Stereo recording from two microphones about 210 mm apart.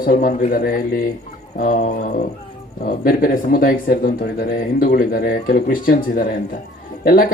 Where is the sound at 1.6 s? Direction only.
40° left (ahead or behind).